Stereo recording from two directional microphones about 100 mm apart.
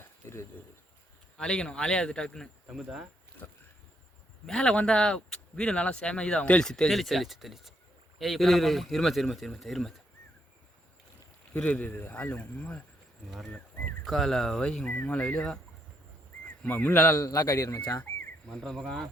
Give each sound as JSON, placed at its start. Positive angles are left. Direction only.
{"t": 1.4, "sound": "speech", "side_deg": 10}
{"t": 2.6, "sound": "speech", "side_deg": -5}
{"t": 3.4, "sound": "speech", "side_deg": 20}
{"t": 4.4, "sound": "speech", "side_deg": 10}
{"t": 11.5, "sound": "speech", "side_deg": 15}
{"t": 13.3, "sound": "speech", "side_deg": 0}
{"t": 16.6, "sound": "speech", "side_deg": 20}
{"t": 17.2, "sound": "a man's voice", "side_deg": 35}
{"t": 18.4, "sound": "speech", "side_deg": 5}